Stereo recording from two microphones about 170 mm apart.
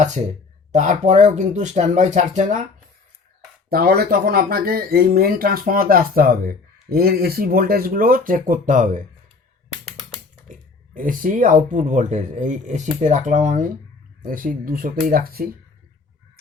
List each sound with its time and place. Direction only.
0.7 s speech: 45° right (ahead or behind)
3.7 s speech: 60° right (ahead or behind)
10.5 s speech: 50° right (ahead or behind)